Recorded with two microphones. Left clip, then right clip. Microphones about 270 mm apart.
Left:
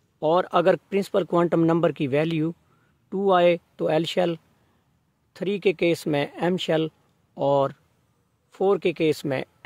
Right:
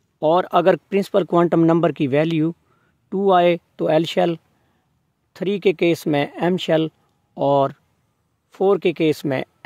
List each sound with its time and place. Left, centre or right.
0.2 s speech: right